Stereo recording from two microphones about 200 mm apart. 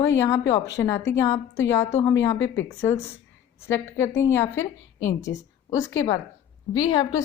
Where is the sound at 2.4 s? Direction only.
70° left (ahead or behind).